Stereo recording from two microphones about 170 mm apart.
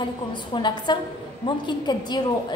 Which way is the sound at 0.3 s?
25° left (ahead or behind).